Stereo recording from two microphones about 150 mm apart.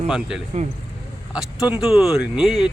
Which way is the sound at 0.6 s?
50° right (ahead or behind).